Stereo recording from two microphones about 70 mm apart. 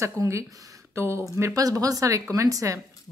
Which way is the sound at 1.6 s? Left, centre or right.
Right.